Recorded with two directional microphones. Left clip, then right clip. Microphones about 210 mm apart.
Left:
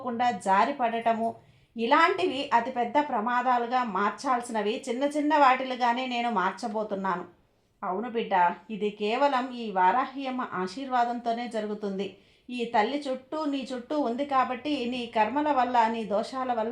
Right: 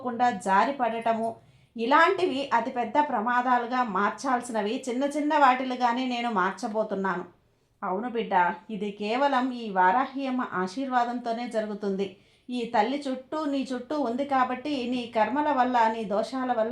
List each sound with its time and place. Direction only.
0.0 s a woman's voice: 30° right (ahead or behind)
8.8 s a woman's voice: 30° right (ahead or behind)